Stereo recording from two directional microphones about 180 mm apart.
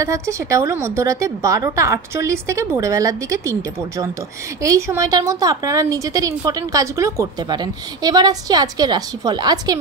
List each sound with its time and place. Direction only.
0.0 s speech: 15° right (ahead or behind)
4.6 s a woman's voice: 15° right (ahead or behind)